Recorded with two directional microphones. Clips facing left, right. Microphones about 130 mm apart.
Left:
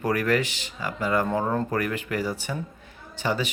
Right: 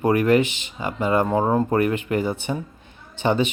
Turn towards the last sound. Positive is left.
turn(degrees=-20)  # may be behind; listen again after turning